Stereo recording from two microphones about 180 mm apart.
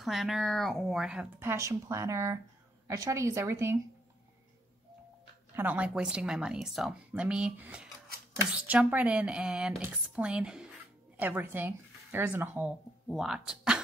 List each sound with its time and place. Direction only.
0.0 s speech: centre (ahead or behind)
5.6 s speech: 10° right (ahead or behind)